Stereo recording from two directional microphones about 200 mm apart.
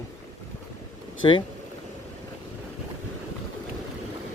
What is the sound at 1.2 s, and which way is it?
Speech, 25° left (ahead or behind).